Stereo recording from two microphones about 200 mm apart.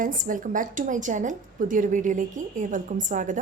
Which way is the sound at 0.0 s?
40° right (ahead or behind).